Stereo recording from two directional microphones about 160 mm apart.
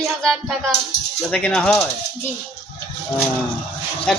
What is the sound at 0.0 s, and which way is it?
A man's voice, centre (ahead or behind).